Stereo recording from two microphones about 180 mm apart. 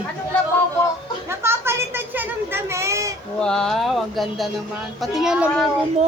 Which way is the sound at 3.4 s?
5° left (ahead or behind).